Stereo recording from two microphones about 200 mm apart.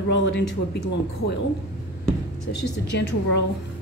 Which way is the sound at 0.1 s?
60° left (ahead or behind).